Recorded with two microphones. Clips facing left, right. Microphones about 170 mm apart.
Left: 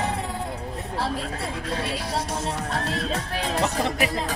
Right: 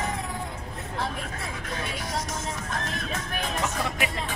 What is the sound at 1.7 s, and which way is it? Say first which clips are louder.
Music: left 3 dB; 35° left (ahead or behind).